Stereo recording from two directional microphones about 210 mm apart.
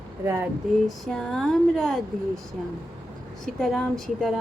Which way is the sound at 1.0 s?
Centre (ahead or behind).